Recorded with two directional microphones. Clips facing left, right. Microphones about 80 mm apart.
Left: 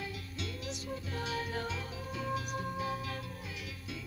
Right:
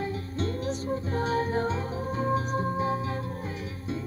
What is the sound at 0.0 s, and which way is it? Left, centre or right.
Music, right.